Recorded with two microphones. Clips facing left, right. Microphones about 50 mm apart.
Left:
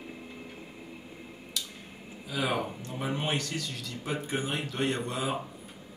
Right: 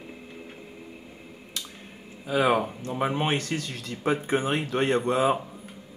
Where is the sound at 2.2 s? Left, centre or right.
Right.